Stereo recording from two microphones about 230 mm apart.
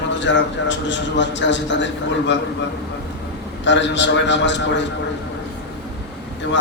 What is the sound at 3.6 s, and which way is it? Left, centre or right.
A man's voice, left.